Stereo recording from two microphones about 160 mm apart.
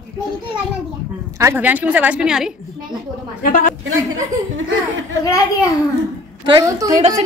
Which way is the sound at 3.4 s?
65° left (ahead or behind).